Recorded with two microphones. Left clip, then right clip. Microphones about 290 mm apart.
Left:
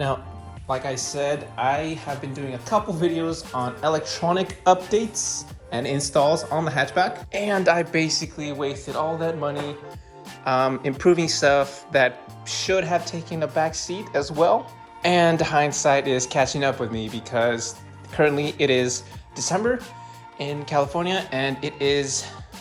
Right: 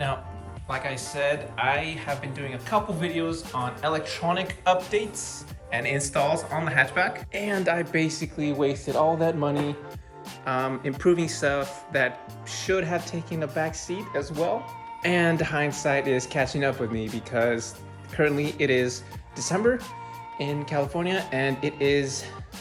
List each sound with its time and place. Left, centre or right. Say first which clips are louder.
1.1 s speech: right 1 dB; centre
4.4 s speech: left 6 dB; centre
10.4 s speech: left 6 dB; centre